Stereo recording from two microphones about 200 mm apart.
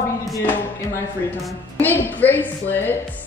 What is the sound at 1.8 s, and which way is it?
A woman's voice, 10° left (ahead or behind).